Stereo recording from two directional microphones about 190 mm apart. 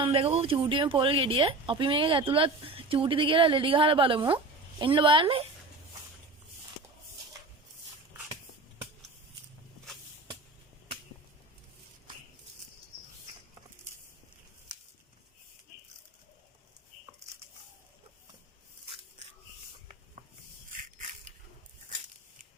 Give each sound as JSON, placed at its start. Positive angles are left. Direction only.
{"t": 0.0, "sound": "speech", "side_deg": -30}